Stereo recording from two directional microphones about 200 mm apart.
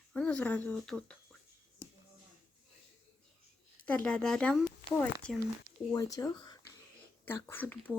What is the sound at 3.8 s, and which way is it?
Speech, 5° left (ahead or behind).